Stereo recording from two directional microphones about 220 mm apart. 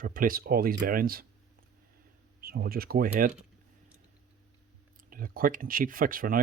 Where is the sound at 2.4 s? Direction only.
40° right (ahead or behind).